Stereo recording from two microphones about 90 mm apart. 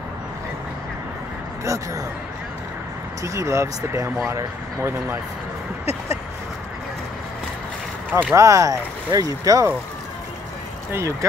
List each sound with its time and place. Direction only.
1.6 s speech: 35° right (ahead or behind)
3.3 s speech: 35° right (ahead or behind)
8.1 s speech: 15° right (ahead or behind)
8.4 s speech: 35° right (ahead or behind)
10.9 s speech: 35° right (ahead or behind)